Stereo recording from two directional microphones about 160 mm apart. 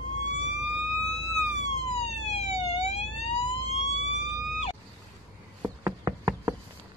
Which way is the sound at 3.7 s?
40° left (ahead or behind).